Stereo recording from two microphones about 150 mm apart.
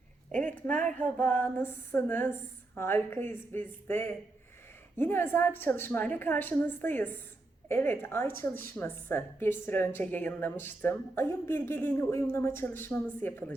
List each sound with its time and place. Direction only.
0.3 s a woman's voice: 10° left (ahead or behind)